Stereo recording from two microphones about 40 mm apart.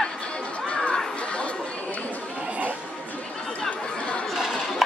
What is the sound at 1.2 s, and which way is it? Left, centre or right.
Chatter, left.